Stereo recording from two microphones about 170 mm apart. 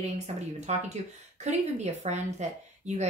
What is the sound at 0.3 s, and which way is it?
A woman's voice, 40° right (ahead or behind).